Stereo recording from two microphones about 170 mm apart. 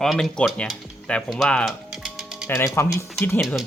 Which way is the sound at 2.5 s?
15° left (ahead or behind).